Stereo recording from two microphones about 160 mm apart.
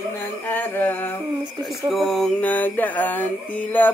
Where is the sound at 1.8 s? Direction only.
Centre (ahead or behind).